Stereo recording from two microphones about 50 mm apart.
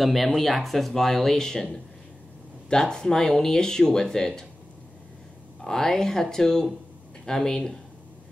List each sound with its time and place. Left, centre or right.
0.0 s speech: centre
5.6 s speech: centre